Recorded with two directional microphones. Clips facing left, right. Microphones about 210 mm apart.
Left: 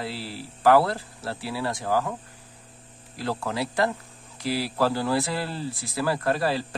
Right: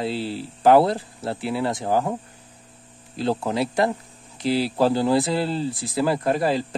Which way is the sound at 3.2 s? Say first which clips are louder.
Right 6 dB; 20° right (ahead or behind).